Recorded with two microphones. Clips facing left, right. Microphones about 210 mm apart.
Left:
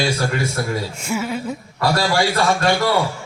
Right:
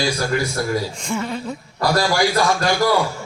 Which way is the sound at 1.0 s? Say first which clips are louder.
Left 1 dB; 5° left (ahead or behind).